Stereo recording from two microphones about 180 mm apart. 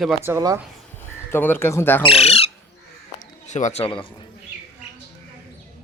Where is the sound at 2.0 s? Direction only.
30° left (ahead or behind).